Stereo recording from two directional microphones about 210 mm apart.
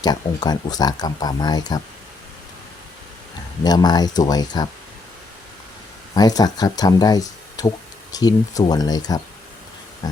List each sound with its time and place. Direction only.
0.0 s speech: 20° left (ahead or behind)
3.6 s speech: 20° left (ahead or behind)
6.1 s speech: 20° left (ahead or behind)